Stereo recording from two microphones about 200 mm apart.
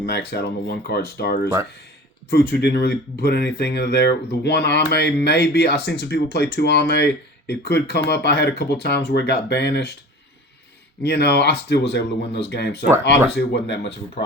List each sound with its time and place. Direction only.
0.0 s speech: 55° left (ahead or behind)
11.0 s speech: 55° left (ahead or behind)